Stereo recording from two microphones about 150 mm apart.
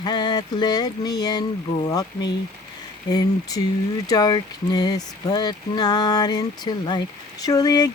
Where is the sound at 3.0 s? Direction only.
25° left (ahead or behind).